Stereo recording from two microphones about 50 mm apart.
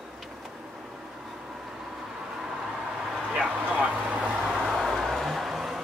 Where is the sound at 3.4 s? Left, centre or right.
Right.